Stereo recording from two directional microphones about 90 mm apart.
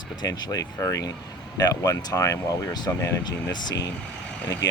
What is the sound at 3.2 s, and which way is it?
Speech, 55° left (ahead or behind).